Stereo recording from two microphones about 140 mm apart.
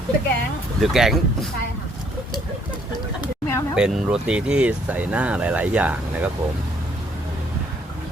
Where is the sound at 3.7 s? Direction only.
5° right (ahead or behind).